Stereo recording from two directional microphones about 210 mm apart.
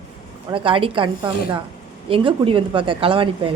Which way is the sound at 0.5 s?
25° right (ahead or behind).